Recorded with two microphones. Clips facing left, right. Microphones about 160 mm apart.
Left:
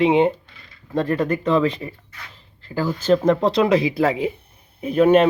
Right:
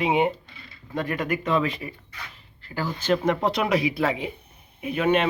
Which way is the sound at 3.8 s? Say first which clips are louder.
Left 5 dB; 30° left (ahead or behind).